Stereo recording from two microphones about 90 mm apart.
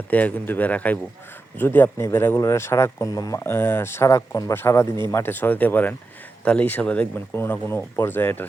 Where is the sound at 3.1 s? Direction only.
45° left (ahead or behind).